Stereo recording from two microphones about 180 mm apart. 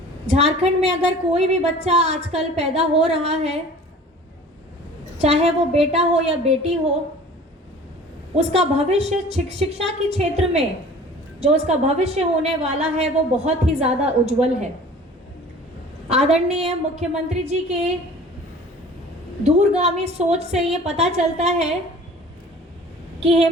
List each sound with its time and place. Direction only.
0.3 s a woman's voice: 35° right (ahead or behind)
5.1 s a woman's voice: 35° right (ahead or behind)
8.4 s a woman's voice: 35° right (ahead or behind)
16.0 s a woman's voice: 35° right (ahead or behind)
19.5 s a woman's voice: 35° right (ahead or behind)
23.2 s a woman's voice: 35° right (ahead or behind)